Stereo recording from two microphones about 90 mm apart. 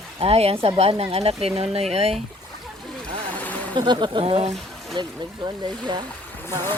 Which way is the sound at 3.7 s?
60° right (ahead or behind).